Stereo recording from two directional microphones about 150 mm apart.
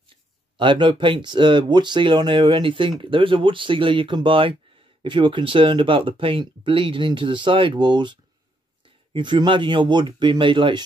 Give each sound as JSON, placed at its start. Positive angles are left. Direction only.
{"t": 0.1, "sound": "speech", "side_deg": -35}